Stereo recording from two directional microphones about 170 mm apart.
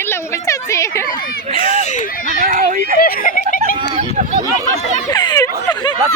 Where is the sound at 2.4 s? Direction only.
50° right (ahead or behind).